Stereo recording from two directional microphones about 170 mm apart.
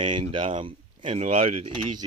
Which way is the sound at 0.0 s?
30° right (ahead or behind).